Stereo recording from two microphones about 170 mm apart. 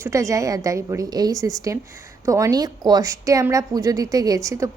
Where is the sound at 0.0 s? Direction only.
15° right (ahead or behind).